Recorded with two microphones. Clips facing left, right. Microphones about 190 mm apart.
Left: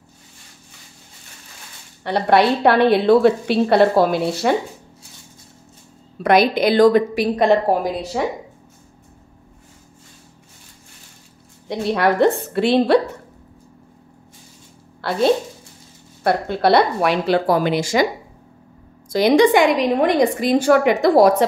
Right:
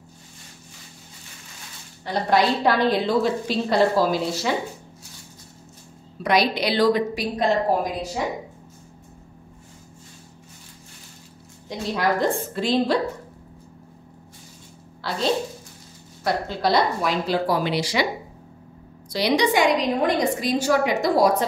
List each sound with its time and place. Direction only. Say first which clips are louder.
2.0 s a woman's voice: left 5 dB; 65° left (ahead or behind)
6.2 s a woman's voice: left 6 dB; 50° left (ahead or behind)
11.8 s a woman's voice: left 6 dB; 65° left (ahead or behind)
15.0 s a sound: left 7 dB; 55° left (ahead or behind)
16.3 s a woman's voice: left 6 dB; 60° left (ahead or behind)
19.0 s a woman's voice: left 7 dB; 50° left (ahead or behind)